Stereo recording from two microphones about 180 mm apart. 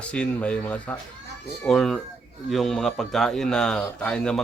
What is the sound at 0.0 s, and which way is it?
A man's voice, 5° left (ahead or behind).